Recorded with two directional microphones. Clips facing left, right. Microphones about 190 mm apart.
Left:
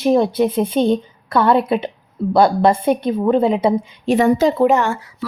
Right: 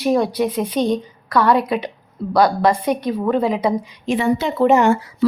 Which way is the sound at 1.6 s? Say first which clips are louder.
Left 3 dB; 25° left (ahead or behind).